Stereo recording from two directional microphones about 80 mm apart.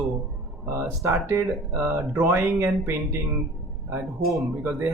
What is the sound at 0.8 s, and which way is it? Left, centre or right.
Speech, right.